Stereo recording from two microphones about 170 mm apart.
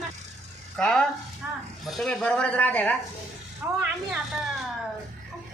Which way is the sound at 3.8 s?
5° right (ahead or behind).